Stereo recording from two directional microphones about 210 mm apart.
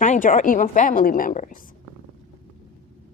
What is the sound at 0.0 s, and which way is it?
A woman's voice, 35° left (ahead or behind).